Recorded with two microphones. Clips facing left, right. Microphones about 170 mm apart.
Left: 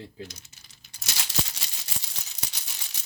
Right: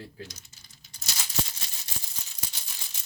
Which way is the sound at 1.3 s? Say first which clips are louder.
Even; 85° left.